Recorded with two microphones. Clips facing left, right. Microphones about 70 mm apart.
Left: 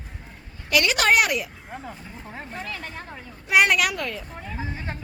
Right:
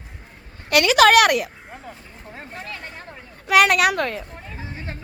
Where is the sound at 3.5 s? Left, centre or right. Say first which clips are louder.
Right 3 dB; right.